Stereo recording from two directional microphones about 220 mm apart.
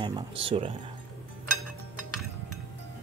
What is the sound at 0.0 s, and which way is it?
Speech, 25° right (ahead or behind).